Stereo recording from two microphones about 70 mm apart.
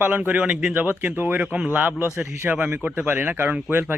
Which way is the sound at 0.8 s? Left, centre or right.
Right.